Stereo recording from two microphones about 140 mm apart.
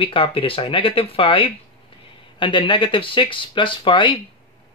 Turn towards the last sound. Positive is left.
turn(degrees=35)  # may be behind; listen again after turning